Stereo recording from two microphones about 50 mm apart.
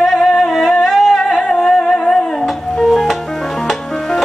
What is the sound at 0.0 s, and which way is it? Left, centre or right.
Music, centre.